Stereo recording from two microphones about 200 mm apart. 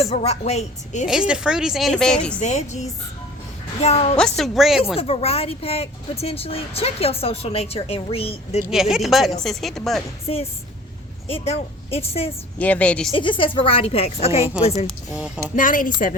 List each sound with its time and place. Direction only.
0.0 s a woman's voice: 30° left (ahead or behind)
1.0 s a woman's voice: 5° right (ahead or behind)
2.4 s a woman's voice: 35° left (ahead or behind)
4.2 s a woman's voice: centre (ahead or behind)
4.9 s speech: 30° left (ahead or behind)
8.7 s a woman's voice: centre (ahead or behind)
11.3 s a woman's voice: 30° left (ahead or behind)
12.5 s a woman's voice: 5° left (ahead or behind)
13.1 s a woman's voice: 25° left (ahead or behind)
15.1 s a woman's voice: 5° right (ahead or behind)
15.5 s a woman's voice: 45° left (ahead or behind)